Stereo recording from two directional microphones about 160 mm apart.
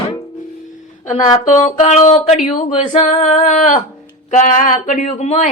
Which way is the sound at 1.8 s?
45° left (ahead or behind).